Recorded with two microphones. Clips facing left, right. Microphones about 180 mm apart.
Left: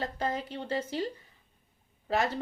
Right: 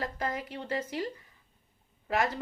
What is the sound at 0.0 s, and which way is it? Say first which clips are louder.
Speech: left 2 dB; 30° left (ahead or behind).